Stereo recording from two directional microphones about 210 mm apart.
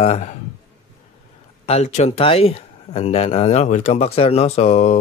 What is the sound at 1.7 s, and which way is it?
Speech, 30° left (ahead or behind).